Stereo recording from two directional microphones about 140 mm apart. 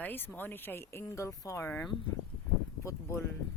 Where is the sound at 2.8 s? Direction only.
20° left (ahead or behind).